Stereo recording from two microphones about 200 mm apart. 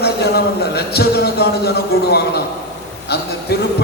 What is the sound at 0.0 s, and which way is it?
A man's voice, 55° left (ahead or behind).